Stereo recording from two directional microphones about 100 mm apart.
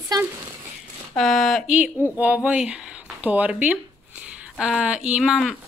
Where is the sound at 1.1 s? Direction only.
5° left (ahead or behind).